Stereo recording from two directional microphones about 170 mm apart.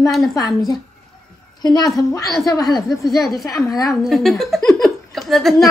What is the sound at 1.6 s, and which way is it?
A woman's voice, 25° left (ahead or behind).